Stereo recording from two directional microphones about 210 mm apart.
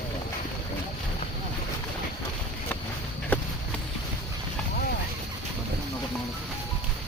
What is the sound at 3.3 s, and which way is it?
Clip-clop, 10° left (ahead or behind).